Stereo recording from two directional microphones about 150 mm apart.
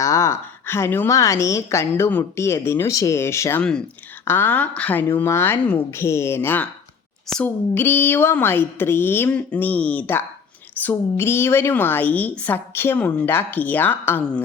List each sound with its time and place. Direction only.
0.0 s a woman's voice: 20° left (ahead or behind)
3.6 s a woman's voice: 5° left (ahead or behind)